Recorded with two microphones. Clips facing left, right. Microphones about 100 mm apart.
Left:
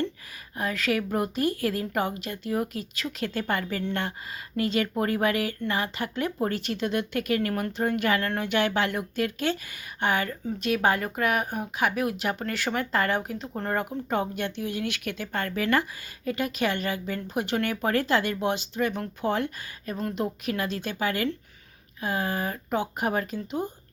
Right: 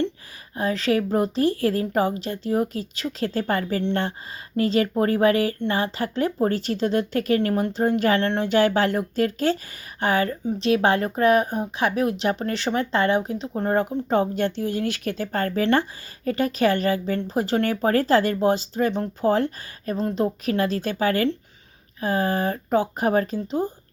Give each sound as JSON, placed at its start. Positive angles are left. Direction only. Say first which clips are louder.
{"t": 0.5, "sound": "speech", "louder": "right 5 dB", "side_deg": -30}
{"t": 10.4, "sound": "speech", "louder": "right 3 dB", "side_deg": -25}